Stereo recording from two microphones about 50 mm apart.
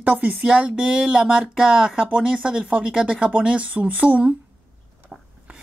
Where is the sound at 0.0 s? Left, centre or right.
Right.